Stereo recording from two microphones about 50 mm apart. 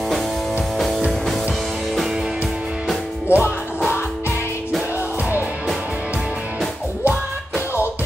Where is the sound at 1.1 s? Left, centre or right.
Centre.